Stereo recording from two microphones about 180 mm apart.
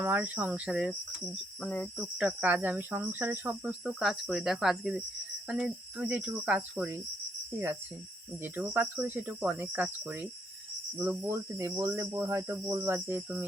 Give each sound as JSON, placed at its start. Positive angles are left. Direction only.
{"t": 0.0, "sound": "speech", "side_deg": -10}
{"t": 1.6, "sound": "cricket", "side_deg": 5}
{"t": 2.1, "sound": "speech", "side_deg": -5}
{"t": 8.4, "sound": "speech", "side_deg": -10}